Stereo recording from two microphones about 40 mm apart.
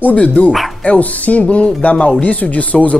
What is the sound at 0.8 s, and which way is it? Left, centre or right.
Speech, left.